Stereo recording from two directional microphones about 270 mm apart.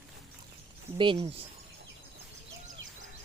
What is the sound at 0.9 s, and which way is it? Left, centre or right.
Speech, centre.